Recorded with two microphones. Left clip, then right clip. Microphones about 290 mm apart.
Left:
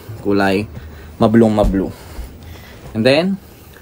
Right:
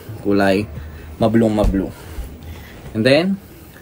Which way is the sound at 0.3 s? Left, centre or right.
Centre.